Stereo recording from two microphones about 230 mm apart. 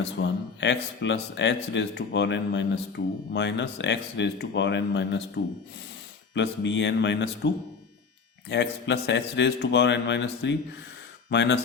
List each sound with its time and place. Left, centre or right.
0.2 s speech: left